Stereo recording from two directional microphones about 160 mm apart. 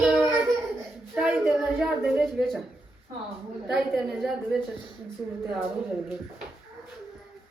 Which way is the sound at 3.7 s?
Centre (ahead or behind).